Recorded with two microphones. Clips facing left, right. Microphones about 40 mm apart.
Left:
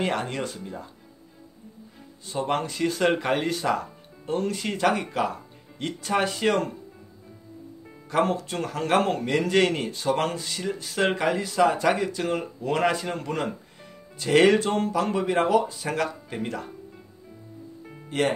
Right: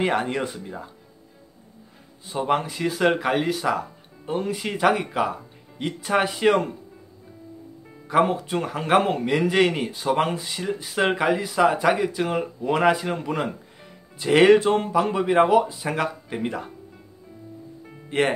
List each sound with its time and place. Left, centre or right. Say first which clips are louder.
0.0 s a man's voice: right 4 dB; centre
2.2 s a man's voice: right 3 dB; centre
8.1 s a man's voice: right 4 dB; centre
18.1 s speech: right 3 dB; right